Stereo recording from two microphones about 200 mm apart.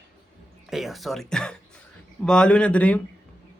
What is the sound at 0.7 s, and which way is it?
A man's voice, centre (ahead or behind).